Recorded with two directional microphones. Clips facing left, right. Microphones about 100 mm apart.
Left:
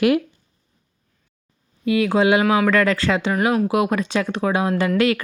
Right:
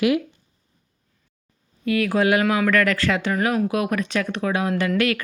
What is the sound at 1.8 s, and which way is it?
Speech, 20° left (ahead or behind).